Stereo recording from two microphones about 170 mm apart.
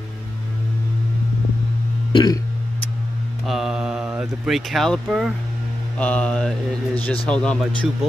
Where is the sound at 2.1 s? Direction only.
25° left (ahead or behind).